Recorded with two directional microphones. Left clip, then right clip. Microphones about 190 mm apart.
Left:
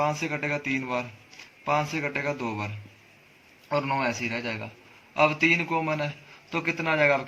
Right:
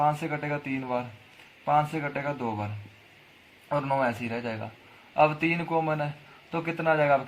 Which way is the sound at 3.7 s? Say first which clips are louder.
Even; 15° right (ahead or behind).